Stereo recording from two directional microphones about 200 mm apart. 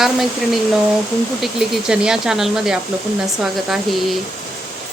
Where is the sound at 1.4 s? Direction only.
Centre (ahead or behind).